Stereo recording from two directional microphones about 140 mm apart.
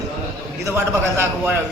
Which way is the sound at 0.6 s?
20° right (ahead or behind).